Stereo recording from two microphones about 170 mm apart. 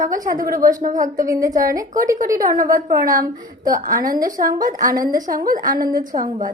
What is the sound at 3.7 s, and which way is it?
Speech, 50° right (ahead or behind).